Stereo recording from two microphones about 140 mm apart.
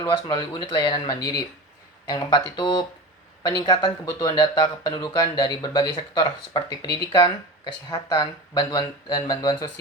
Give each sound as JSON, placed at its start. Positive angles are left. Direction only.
{"t": 0.0, "sound": "speech", "side_deg": 30}